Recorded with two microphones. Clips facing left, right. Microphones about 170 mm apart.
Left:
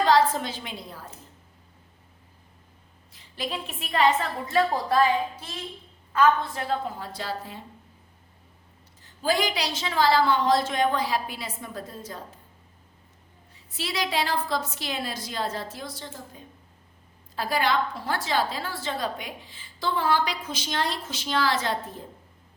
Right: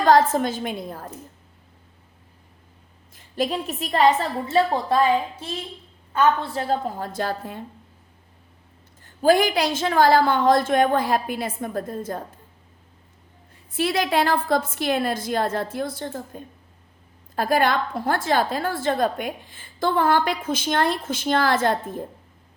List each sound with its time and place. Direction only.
0.0 s a woman's voice: 50° right (ahead or behind)
3.1 s a woman's voice: 45° right (ahead or behind)
4.4 s a woman's voice: 25° right (ahead or behind)
6.1 s a woman's voice: 30° right (ahead or behind); by 7.6 s 55° right (ahead or behind)
9.0 s a woman's voice: 55° right (ahead or behind)
13.5 s a woman's voice: 55° right (ahead or behind)